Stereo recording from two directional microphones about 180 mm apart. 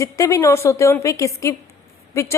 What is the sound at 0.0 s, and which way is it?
A woman's voice, 15° left (ahead or behind).